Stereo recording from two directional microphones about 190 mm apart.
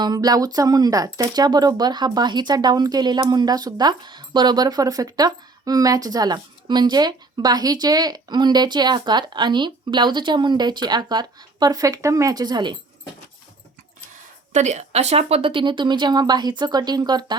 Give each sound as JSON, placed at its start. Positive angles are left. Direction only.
{"t": 0.0, "sound": "speech", "side_deg": -20}
{"t": 14.5, "sound": "speech", "side_deg": -40}